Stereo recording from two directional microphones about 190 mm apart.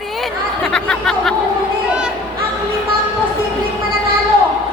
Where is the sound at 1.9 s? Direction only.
5° right (ahead or behind).